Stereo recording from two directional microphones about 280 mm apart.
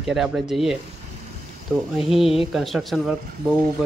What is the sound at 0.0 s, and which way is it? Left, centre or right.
Speech, centre.